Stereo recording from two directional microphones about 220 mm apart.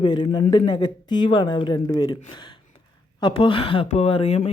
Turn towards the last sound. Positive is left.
turn(degrees=25)  # may be behind; listen again after turning